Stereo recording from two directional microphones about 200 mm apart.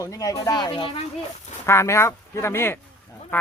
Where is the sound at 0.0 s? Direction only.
15° left (ahead or behind).